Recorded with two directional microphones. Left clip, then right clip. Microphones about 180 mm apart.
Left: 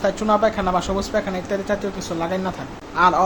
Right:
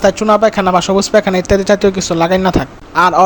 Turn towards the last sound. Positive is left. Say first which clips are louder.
# right 6 dB
turn(degrees=-50)  # may be behind; listen again after turning